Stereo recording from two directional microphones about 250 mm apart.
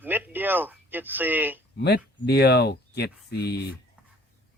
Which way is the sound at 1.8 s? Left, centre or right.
Left.